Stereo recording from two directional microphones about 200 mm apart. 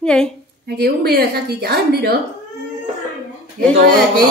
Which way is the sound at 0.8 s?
50° right (ahead or behind).